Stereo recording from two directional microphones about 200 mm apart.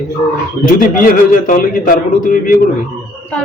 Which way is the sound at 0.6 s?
45° left (ahead or behind).